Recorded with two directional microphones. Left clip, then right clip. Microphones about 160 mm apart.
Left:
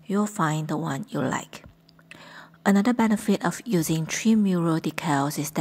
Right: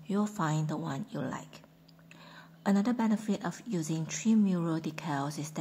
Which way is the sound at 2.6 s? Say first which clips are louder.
Left 8 dB; 35° left (ahead or behind).